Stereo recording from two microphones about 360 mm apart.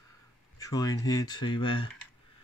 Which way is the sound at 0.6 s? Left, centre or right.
Centre.